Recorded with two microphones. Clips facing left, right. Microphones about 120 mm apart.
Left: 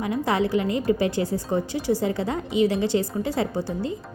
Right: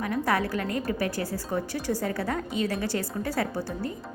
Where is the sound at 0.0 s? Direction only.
20° left (ahead or behind).